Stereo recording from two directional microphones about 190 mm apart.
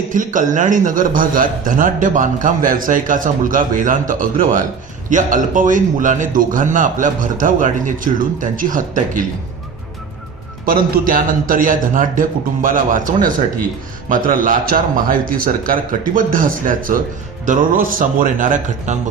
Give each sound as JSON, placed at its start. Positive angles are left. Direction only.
{"t": 0.1, "sound": "a man's voice", "side_deg": -40}
{"t": 10.7, "sound": "a man's voice", "side_deg": -50}